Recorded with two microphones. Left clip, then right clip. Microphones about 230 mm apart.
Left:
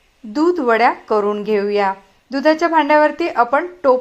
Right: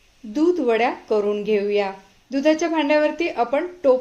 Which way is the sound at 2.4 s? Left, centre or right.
Centre.